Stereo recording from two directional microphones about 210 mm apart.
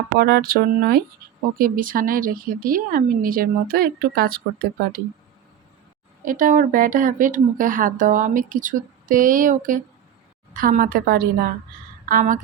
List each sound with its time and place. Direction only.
0.2 s speech: 50° right (ahead or behind)
6.2 s a woman's voice: 40° right (ahead or behind)